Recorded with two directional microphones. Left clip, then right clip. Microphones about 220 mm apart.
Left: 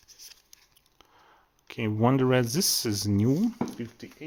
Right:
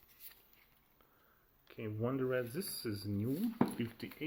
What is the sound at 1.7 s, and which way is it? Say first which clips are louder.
Speech: left 14 dB; 45° left (ahead or behind).